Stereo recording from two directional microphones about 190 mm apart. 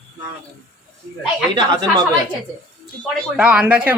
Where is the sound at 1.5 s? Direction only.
25° right (ahead or behind).